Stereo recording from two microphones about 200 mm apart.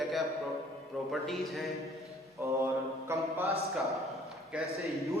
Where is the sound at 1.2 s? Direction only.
Centre (ahead or behind).